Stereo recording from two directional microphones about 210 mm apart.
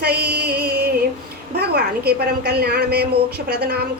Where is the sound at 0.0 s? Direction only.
50° right (ahead or behind).